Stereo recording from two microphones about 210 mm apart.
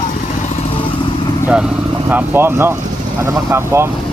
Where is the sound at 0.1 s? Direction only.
35° left (ahead or behind).